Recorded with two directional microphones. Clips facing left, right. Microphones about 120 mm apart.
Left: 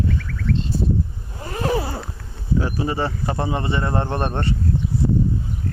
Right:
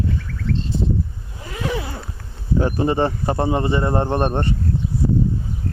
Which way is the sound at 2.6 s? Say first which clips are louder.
Right 4 dB; 45° right (ahead or behind).